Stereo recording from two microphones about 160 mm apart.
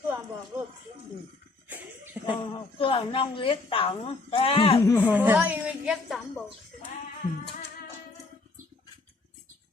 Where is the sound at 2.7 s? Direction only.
35° left (ahead or behind).